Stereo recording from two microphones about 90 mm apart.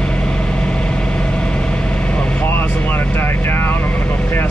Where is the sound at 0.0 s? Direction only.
10° left (ahead or behind).